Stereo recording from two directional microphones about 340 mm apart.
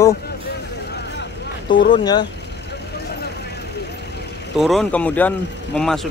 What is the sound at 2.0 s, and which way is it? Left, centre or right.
Speech, centre.